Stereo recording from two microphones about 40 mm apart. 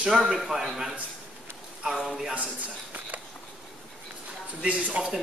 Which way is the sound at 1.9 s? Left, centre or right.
Centre.